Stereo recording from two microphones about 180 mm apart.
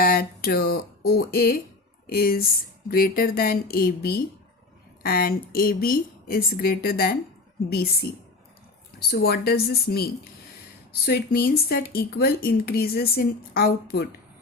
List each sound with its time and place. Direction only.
0.0 s speech: 55° left (ahead or behind)